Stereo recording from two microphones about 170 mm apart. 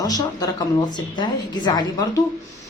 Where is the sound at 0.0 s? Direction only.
20° left (ahead or behind).